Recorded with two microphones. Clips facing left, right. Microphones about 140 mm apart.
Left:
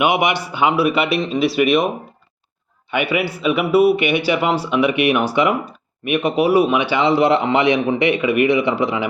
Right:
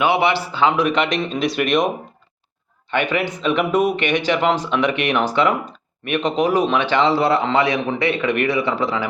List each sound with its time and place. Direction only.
0.0 s a man's voice: 15° left (ahead or behind)
2.9 s a man's voice: 10° left (ahead or behind)